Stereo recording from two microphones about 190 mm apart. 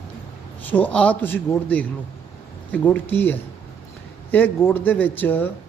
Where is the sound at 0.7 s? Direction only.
10° left (ahead or behind).